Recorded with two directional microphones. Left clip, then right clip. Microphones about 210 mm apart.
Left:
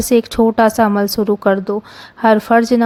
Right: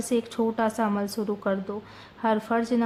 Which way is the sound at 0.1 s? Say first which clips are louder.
Left 13 dB; 40° left (ahead or behind).